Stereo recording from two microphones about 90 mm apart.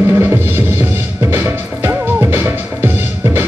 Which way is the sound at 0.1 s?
20° right (ahead or behind).